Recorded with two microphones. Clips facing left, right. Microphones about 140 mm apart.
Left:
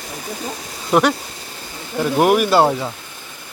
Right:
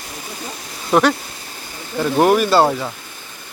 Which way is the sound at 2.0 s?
10° left (ahead or behind).